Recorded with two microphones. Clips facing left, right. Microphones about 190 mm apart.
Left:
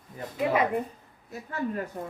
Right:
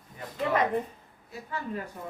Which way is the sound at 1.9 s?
45° left (ahead or behind).